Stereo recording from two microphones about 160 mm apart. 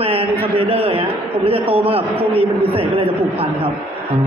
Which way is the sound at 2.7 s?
35° right (ahead or behind).